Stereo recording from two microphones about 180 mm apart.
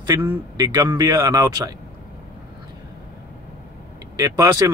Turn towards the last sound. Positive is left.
turn(degrees=-20)  # may be behind; listen again after turning